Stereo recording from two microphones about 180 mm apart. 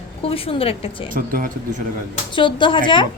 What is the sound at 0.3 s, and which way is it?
Speech, 30° left (ahead or behind).